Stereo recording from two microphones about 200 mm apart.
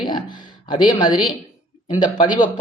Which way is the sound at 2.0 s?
20° left (ahead or behind).